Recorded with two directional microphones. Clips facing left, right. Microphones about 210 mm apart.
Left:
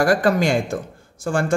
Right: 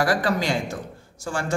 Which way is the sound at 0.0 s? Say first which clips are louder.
Left 5 dB; 50° left (ahead or behind).